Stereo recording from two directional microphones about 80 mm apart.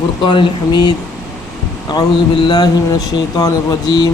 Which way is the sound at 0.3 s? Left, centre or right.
Left.